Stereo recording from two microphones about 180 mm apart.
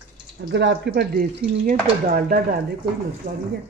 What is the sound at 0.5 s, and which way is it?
Speech, 75° right (ahead or behind).